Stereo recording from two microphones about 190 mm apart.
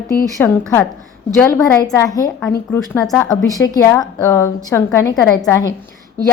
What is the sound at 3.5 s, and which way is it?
A woman's voice, 20° left (ahead or behind).